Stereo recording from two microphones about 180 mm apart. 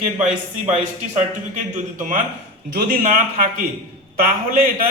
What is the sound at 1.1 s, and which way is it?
Speech, 45° right (ahead or behind).